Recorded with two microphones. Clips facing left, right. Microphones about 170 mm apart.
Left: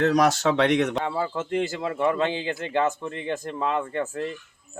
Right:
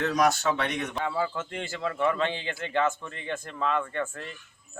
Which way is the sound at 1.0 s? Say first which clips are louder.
Left 2 dB; 30° left (ahead or behind).